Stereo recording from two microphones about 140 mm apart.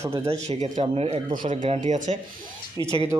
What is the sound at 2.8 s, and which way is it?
Speech, 30° right (ahead or behind).